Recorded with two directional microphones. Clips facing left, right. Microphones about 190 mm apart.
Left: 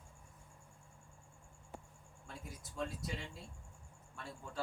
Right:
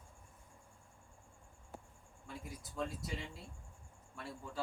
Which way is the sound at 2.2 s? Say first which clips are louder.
Right 3 dB; centre (ahead or behind).